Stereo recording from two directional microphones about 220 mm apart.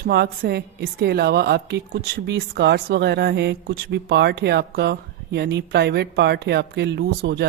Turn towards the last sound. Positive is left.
turn(degrees=-50)  # may be behind; listen again after turning